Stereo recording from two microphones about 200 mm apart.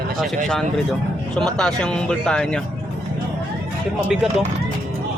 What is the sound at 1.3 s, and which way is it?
Speech, 5° left (ahead or behind).